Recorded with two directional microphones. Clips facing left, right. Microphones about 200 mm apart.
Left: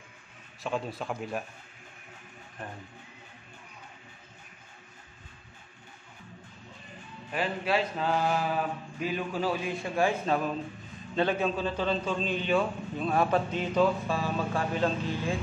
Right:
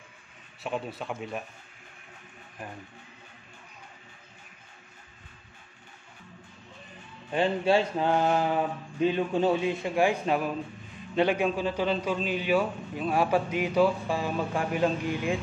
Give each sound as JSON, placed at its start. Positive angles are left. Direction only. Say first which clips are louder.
{"t": 0.6, "sound": "speech", "louder": "even", "side_deg": -5}
{"t": 7.2, "sound": "a sound", "louder": "right 6 dB", "side_deg": -25}
{"t": 11.1, "sound": "a man's voice", "louder": "right 3 dB", "side_deg": -15}